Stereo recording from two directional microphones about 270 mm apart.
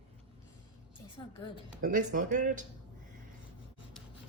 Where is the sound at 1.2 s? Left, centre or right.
Centre.